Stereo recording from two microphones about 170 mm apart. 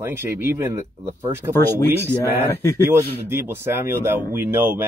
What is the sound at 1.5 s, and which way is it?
Speech, 15° left (ahead or behind).